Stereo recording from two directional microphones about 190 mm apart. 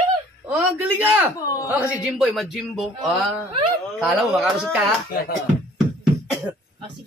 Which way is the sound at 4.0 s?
5° right (ahead or behind).